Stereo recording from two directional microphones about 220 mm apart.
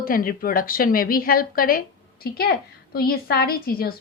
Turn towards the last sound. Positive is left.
turn(degrees=45)  # may be behind; listen again after turning